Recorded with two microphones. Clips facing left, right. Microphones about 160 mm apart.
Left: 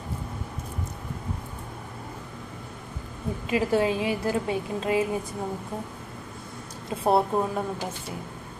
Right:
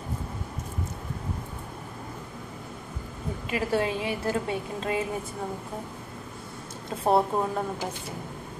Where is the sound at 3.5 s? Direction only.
20° left (ahead or behind).